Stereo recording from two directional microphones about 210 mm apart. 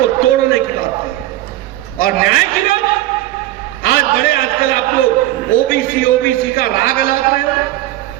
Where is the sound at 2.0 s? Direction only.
45° left (ahead or behind).